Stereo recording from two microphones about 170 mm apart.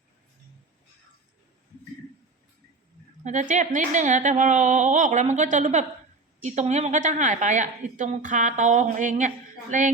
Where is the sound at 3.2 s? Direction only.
45° right (ahead or behind).